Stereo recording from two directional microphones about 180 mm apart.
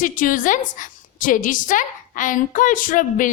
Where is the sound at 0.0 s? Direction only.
45° left (ahead or behind).